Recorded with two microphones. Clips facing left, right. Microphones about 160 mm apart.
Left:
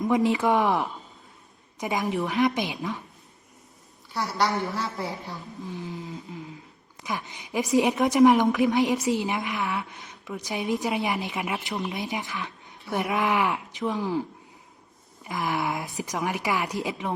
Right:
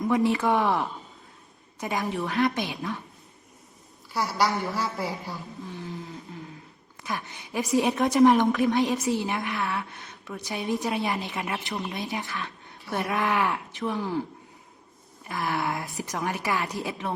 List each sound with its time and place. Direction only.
0.1 s a woman's voice: 15° left (ahead or behind)
4.1 s a woman's voice: centre (ahead or behind)
5.4 s a sound: 20° left (ahead or behind)
7.0 s a woman's voice: 20° left (ahead or behind)
11.7 s a woman's voice: centre (ahead or behind)
11.9 s a woman's voice: 20° left (ahead or behind)